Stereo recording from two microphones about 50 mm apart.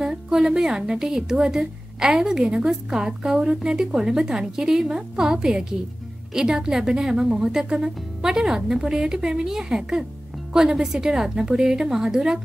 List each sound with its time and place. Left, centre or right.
0.0 s a woman's voice: centre